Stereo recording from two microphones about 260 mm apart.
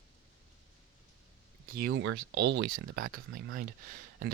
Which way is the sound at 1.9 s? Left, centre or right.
Right.